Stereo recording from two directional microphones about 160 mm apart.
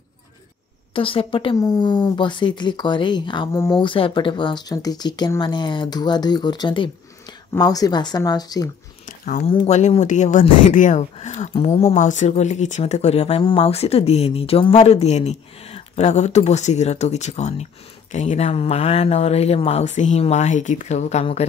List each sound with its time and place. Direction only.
0.9 s speech: 35° left (ahead or behind)
9.0 s a sound: 55° left (ahead or behind)
9.5 s speech: 45° left (ahead or behind)